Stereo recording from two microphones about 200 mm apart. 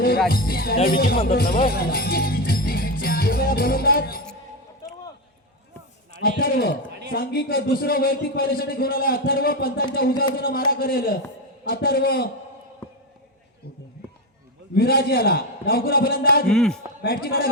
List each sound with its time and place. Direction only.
0.3 s a man's voice: 45° left (ahead or behind)
1.6 s music: 50° left (ahead or behind)
6.2 s a man's voice: 45° left (ahead or behind)
14.8 s a man's voice: 50° left (ahead or behind)
16.5 s a man's voice: 5° left (ahead or behind)
17.0 s a man's voice: 50° left (ahead or behind)